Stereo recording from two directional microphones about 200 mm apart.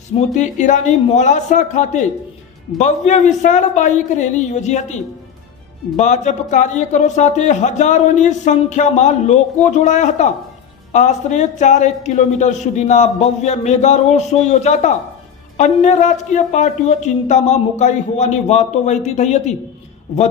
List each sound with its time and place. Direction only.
0.4 s a man's voice: 35° left (ahead or behind)
5.9 s a man's voice: 35° left (ahead or behind)